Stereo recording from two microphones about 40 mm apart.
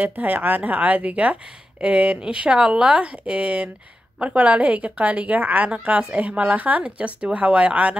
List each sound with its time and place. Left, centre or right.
0.0 s speech: right